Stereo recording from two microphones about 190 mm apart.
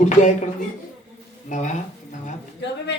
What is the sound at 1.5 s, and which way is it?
Speech, 40° left (ahead or behind).